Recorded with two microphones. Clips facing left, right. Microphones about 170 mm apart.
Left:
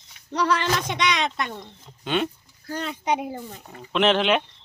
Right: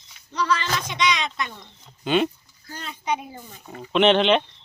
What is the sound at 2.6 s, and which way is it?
Speech, 65° left (ahead or behind).